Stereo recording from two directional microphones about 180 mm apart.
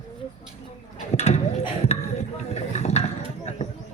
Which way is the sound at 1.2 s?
35° left (ahead or behind).